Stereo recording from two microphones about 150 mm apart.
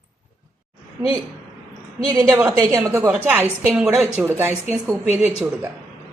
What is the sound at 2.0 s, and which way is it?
A woman's voice, 20° right (ahead or behind).